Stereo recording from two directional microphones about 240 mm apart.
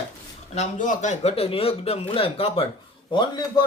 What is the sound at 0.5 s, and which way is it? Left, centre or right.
Speech, left.